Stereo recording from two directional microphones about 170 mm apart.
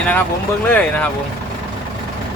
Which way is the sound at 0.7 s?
10° left (ahead or behind).